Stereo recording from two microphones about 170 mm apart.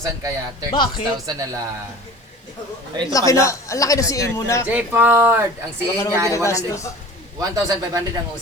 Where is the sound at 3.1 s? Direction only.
20° left (ahead or behind).